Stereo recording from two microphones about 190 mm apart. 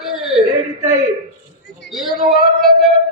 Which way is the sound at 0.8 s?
15° right (ahead or behind).